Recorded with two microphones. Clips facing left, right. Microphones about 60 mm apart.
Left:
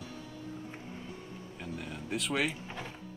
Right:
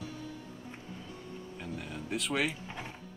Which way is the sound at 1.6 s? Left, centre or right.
Centre.